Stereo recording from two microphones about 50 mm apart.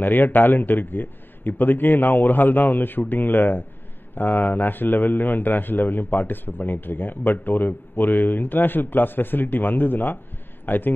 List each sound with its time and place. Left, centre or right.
0.0 s a man's voice: left